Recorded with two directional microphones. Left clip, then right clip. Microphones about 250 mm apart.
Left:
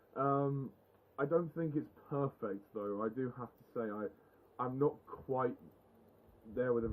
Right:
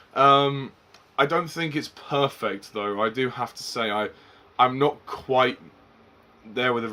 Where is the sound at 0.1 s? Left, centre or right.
Centre.